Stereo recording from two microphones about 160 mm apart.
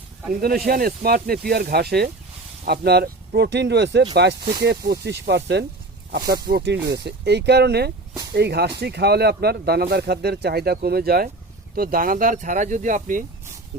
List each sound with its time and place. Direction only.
0.3 s speech: 65° right (ahead or behind); by 5.6 s 90° right
6.1 s speech: 70° right (ahead or behind)